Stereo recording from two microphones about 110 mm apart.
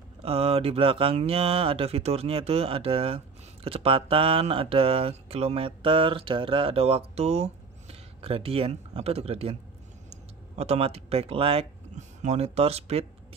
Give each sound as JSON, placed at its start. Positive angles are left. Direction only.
{"t": 0.2, "sound": "speech", "side_deg": -60}
{"t": 10.0, "sound": "speech", "side_deg": -80}